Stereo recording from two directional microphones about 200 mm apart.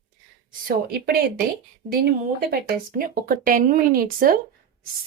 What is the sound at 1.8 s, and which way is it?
Speech, 25° right (ahead or behind).